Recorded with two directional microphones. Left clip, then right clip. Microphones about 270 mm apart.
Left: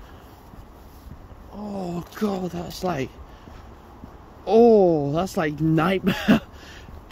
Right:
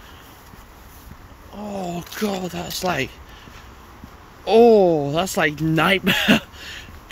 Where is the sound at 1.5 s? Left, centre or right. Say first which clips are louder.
Right 3 dB; left.